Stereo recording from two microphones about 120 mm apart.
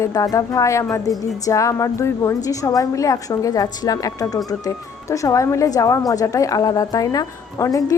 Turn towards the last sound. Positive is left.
turn(degrees=30)  # may be behind; listen again after turning